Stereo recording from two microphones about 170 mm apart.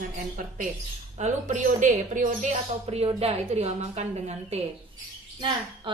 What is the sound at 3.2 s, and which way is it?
A woman's voice, 40° right (ahead or behind).